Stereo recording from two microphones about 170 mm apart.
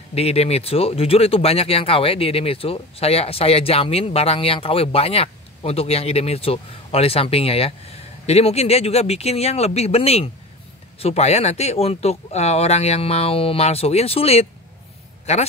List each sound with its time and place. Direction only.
0.1 s speech: 35° left (ahead or behind)